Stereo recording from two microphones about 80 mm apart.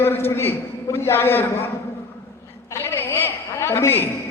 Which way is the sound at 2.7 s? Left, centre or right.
Left.